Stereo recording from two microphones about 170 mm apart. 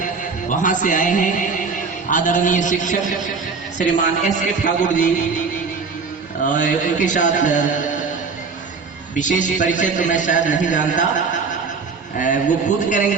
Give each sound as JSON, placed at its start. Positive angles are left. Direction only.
{"t": 0.0, "sound": "a man's voice", "side_deg": 50}
{"t": 6.5, "sound": "a man's voice", "side_deg": 50}
{"t": 9.1, "sound": "a man's voice", "side_deg": 50}
{"t": 12.1, "sound": "a man's voice", "side_deg": 50}